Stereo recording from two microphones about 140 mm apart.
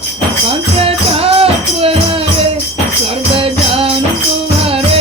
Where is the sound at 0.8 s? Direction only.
45° right (ahead or behind).